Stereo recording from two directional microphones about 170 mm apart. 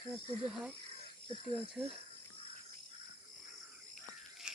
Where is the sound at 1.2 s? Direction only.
35° right (ahead or behind).